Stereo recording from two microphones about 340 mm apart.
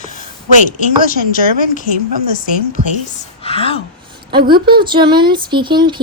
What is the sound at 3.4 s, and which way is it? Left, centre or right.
Speech, centre.